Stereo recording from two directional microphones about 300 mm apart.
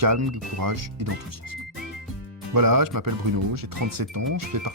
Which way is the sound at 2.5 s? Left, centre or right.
Right.